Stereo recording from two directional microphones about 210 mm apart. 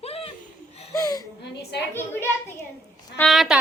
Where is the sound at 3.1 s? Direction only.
Centre (ahead or behind).